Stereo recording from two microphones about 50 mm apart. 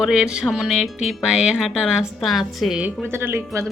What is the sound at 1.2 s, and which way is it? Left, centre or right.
Music, centre.